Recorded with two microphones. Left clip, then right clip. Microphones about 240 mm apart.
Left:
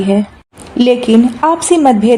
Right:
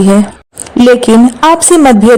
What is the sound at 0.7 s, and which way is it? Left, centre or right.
Speech, right.